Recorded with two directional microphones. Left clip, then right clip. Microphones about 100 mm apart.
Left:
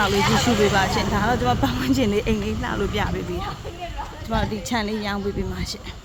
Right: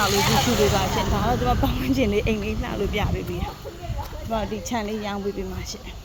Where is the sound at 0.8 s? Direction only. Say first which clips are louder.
Left 3 dB; 25° left (ahead or behind).